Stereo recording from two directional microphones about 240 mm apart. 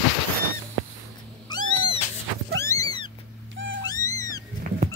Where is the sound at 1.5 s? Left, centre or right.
Centre.